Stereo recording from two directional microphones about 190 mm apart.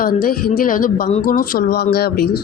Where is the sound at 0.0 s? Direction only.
50° left (ahead or behind).